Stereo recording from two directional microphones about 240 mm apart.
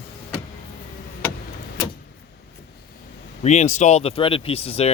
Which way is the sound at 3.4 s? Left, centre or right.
Left.